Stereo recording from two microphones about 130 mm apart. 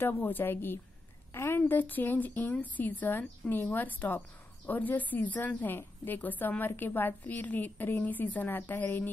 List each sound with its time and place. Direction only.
0.0 s a woman's voice: 15° left (ahead or behind)